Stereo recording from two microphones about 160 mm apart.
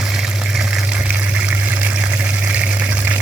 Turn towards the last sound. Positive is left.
turn(degrees=-10)  # may be behind; listen again after turning